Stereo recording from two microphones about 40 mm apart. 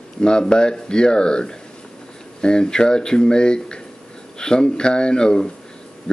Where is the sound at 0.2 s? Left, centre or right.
Left.